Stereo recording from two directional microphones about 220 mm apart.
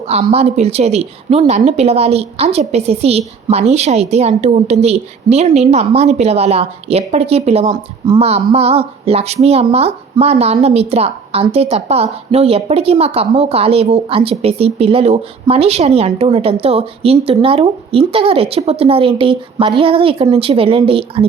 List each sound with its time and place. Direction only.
0.1 s a woman's voice: 30° right (ahead or behind)